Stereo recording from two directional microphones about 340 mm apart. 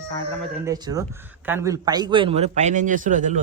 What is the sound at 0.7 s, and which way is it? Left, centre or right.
A man's voice, centre.